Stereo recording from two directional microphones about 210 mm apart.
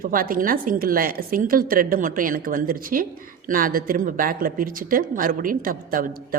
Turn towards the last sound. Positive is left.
turn(degrees=-40)  # may be behind; listen again after turning